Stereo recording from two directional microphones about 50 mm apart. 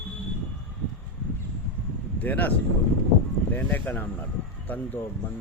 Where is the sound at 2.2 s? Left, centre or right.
Left.